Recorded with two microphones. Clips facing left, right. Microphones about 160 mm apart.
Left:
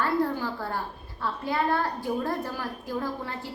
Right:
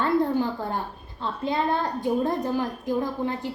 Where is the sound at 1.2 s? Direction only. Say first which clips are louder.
Right 2 dB; 20° right (ahead or behind).